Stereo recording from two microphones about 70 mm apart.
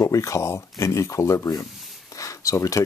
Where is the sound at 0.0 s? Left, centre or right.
Left.